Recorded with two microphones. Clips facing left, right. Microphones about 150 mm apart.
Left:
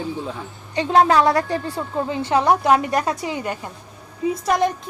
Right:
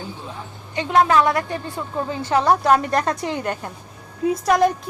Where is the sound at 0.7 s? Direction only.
30° left (ahead or behind).